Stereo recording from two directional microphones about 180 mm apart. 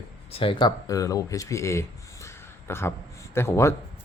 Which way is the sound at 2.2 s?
15° left (ahead or behind).